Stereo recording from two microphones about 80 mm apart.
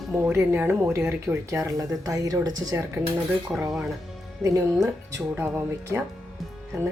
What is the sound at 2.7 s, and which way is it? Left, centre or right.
Speech, right.